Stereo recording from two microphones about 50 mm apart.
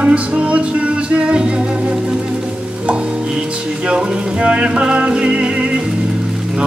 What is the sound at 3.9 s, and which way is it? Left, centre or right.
Music, right.